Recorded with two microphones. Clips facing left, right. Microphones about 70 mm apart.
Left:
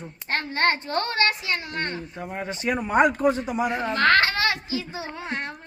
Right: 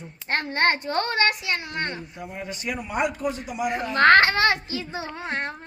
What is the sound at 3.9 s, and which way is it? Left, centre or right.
A child's voice, right.